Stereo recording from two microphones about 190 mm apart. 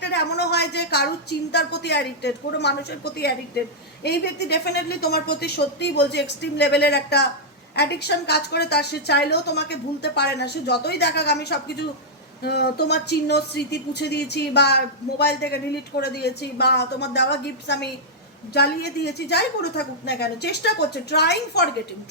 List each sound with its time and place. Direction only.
0.0 s a woman's voice: 60° left (ahead or behind)